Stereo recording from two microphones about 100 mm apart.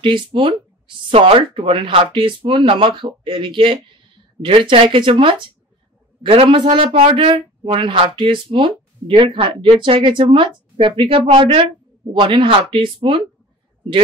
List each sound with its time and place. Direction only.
0.0 s speech: 60° right (ahead or behind)
12.1 s speech: 55° right (ahead or behind)